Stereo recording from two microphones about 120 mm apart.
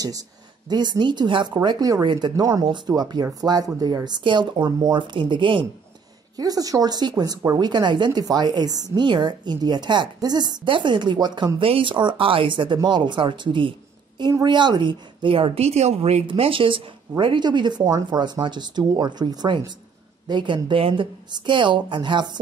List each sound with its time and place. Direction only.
0.7 s speech: 35° right (ahead or behind)
6.3 s speech: 30° right (ahead or behind)
11.6 s a woman's voice: 50° right (ahead or behind)